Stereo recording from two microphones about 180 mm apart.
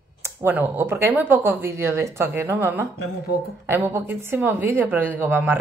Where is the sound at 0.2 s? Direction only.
10° right (ahead or behind).